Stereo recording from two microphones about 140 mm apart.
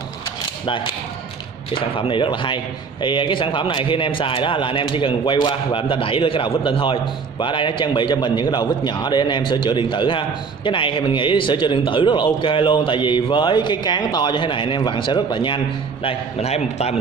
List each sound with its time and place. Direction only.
1.7 s a man's voice: 40° left (ahead or behind)